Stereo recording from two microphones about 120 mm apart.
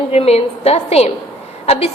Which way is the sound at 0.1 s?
60° left (ahead or behind).